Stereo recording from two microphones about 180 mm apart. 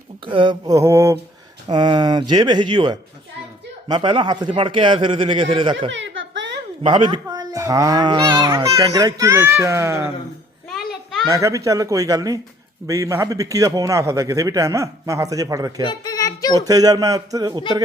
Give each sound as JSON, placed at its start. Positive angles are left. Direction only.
{"t": 0.3, "sound": "speech", "side_deg": -25}
{"t": 5.9, "sound": "giggle", "side_deg": -90}
{"t": 6.8, "sound": "speech", "side_deg": -25}
{"t": 10.7, "sound": "a sound", "side_deg": 0}
{"t": 11.3, "sound": "a man's voice", "side_deg": -15}
{"t": 15.9, "sound": "a sound", "side_deg": 20}
{"t": 16.6, "sound": "speech", "side_deg": -20}